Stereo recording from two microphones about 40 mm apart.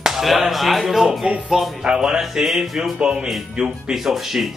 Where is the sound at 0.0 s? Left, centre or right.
Centre.